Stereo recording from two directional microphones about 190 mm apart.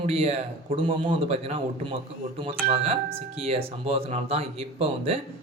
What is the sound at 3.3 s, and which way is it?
Speech, 35° right (ahead or behind).